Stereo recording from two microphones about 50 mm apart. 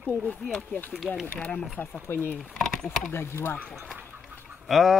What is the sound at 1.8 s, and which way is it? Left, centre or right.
Speech, left.